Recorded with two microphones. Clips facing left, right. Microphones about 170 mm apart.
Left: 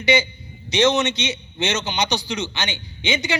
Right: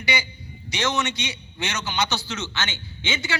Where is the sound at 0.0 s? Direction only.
20° left (ahead or behind).